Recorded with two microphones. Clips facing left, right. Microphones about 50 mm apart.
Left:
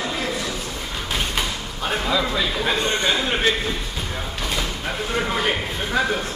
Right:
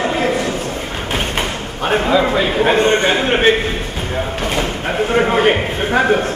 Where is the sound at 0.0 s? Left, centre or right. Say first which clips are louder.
Right 9 dB; right.